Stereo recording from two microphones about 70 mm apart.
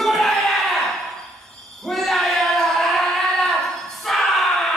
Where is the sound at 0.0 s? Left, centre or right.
Centre.